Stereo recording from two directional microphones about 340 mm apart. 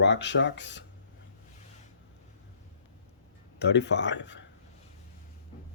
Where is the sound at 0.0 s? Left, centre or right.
Left.